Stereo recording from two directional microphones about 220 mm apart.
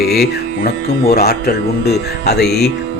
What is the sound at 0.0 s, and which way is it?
Speech, 45° left (ahead or behind).